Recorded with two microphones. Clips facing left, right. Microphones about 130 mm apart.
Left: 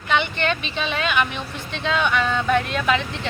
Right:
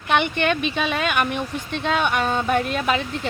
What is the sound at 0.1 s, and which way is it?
Speech, 55° right (ahead or behind).